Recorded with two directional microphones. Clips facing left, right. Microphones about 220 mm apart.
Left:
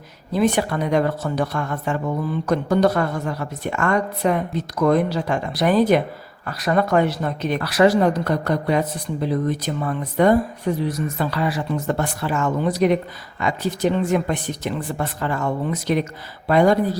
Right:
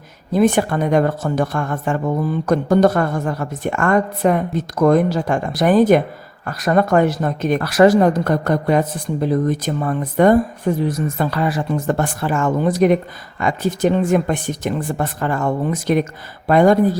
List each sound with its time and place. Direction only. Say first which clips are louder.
0.3 s a woman's voice: right 4 dB; 50° right (ahead or behind)